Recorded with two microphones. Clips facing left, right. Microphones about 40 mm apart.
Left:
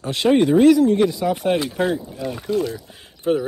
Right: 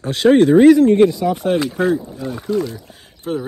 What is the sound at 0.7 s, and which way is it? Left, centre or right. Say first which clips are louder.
Speech: right 4 dB; right.